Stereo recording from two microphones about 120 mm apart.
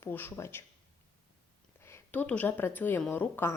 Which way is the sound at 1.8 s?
20° left (ahead or behind).